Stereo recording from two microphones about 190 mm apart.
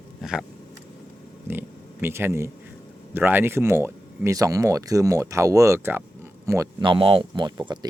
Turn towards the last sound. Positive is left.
turn(degrees=-25)  # may be behind; listen again after turning